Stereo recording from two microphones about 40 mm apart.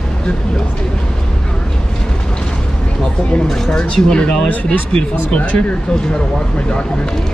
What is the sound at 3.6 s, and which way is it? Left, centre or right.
Speech, left.